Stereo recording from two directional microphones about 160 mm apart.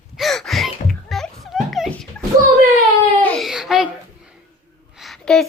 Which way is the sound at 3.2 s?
10° left (ahead or behind).